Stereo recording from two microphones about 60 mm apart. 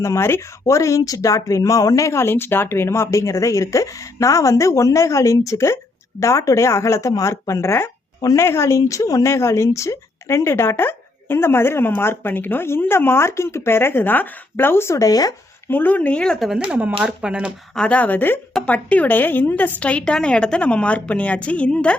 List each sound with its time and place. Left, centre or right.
0.0 s speech: left
0.6 s speech: left
9.3 s speech: left
14.9 s speech: left
15.7 s a woman's voice: left
17.2 s speech: centre
17.7 s a woman's voice: left